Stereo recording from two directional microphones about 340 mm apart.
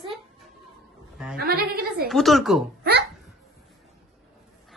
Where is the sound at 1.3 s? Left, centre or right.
Right.